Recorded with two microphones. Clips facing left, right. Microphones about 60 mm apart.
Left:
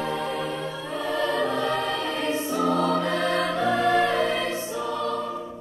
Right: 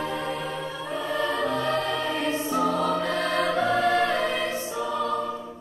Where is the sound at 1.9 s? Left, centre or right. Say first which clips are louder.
Even; centre.